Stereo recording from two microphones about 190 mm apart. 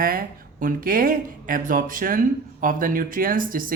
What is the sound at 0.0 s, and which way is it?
Speech, 50° right (ahead or behind).